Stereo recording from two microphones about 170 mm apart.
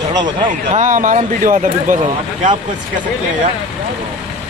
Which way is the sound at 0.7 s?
50° right (ahead or behind).